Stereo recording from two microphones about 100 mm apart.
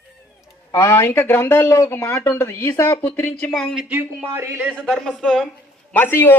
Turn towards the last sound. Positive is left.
turn(degrees=20)  # may be behind; listen again after turning